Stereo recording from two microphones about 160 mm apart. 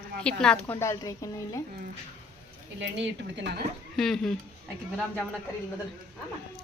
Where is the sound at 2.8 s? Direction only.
90° right.